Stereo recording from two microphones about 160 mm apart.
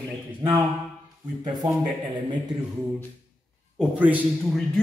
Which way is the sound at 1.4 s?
25° right (ahead or behind).